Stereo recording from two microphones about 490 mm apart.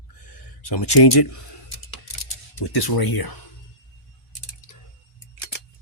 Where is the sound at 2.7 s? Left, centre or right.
Left.